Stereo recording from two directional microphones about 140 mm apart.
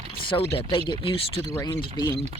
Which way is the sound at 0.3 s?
40° left (ahead or behind).